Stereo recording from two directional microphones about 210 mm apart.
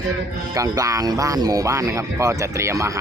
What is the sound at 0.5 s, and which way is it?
Speech, 15° right (ahead or behind).